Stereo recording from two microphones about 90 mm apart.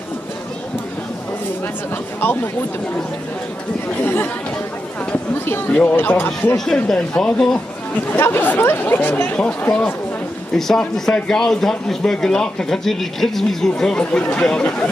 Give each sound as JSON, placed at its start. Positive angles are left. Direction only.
{"t": 2.1, "sound": "speech", "side_deg": 25}
{"t": 4.0, "sound": "speech", "side_deg": 25}
{"t": 5.7, "sound": "speech", "side_deg": 15}
{"t": 6.5, "sound": "speech", "side_deg": 5}
{"t": 8.1, "sound": "speech", "side_deg": 25}
{"t": 10.5, "sound": "speech", "side_deg": 5}